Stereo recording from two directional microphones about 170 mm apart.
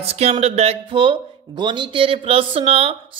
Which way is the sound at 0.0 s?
40° right (ahead or behind).